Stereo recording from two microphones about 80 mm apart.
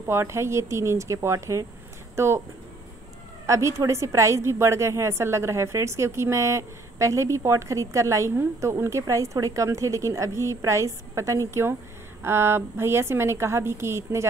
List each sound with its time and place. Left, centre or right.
0.0 s a woman's voice: right
3.4 s a woman's voice: right